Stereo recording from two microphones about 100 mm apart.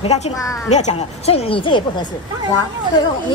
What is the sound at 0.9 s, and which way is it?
Speech, 90° left.